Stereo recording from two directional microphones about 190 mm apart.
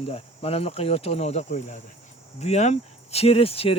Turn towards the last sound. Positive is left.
turn(degrees=30)  # may be behind; listen again after turning